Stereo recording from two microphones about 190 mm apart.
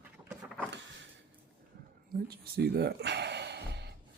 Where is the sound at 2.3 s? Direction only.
55° right (ahead or behind).